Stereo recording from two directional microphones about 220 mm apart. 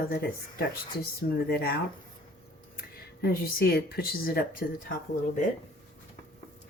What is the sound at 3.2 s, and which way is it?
Speech, 45° left (ahead or behind).